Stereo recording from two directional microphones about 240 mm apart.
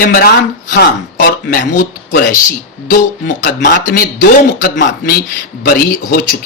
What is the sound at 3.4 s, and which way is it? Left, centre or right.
Speech, left.